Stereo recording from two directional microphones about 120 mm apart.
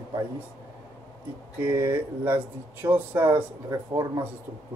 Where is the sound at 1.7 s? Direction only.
20° right (ahead or behind).